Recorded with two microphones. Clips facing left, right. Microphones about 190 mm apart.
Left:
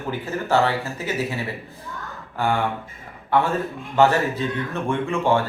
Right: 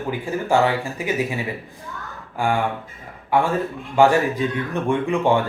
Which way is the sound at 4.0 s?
15° right (ahead or behind).